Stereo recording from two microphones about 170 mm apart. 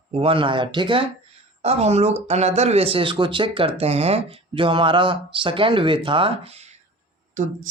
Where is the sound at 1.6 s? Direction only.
40° right (ahead or behind).